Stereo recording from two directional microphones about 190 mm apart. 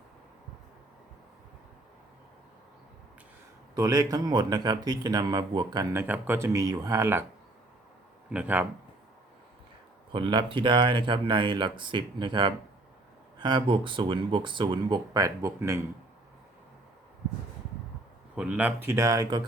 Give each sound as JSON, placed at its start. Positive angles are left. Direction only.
{"t": 3.8, "sound": "speech", "side_deg": -20}
{"t": 8.3, "sound": "speech", "side_deg": -10}
{"t": 10.1, "sound": "speech", "side_deg": -25}
{"t": 18.3, "sound": "speech", "side_deg": -5}